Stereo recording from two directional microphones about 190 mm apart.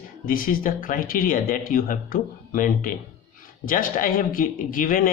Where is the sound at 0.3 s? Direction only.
45° left (ahead or behind).